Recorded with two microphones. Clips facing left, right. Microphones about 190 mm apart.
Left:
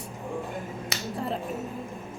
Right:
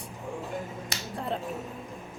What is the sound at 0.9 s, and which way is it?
Finger snapping, centre (ahead or behind).